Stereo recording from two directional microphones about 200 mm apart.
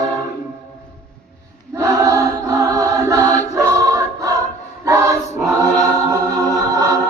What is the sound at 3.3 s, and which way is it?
Choir, 35° left (ahead or behind).